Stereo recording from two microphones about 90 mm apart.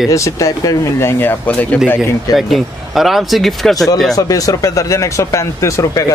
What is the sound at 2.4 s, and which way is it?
Speech, centre (ahead or behind).